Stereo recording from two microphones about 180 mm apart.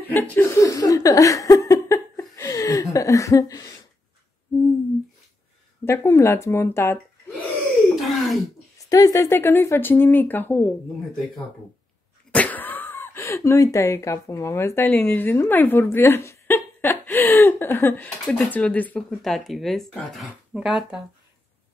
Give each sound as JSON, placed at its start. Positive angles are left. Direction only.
{"t": 0.1, "sound": "laughter", "side_deg": 15}
{"t": 5.9, "sound": "speech", "side_deg": 15}
{"t": 7.9, "sound": "a sound", "side_deg": 0}
{"t": 8.8, "sound": "speech", "side_deg": 20}
{"t": 12.3, "sound": "speech", "side_deg": 10}